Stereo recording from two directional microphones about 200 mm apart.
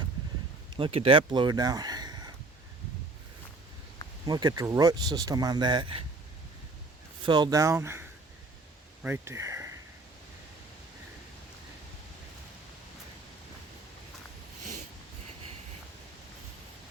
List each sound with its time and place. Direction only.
0.7 s speech: 25° right (ahead or behind)
4.3 s speech: 20° right (ahead or behind)
7.3 s speech: 20° right (ahead or behind)
9.0 s speech: 10° right (ahead or behind)